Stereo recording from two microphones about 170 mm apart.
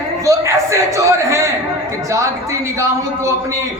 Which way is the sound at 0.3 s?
20° right (ahead or behind).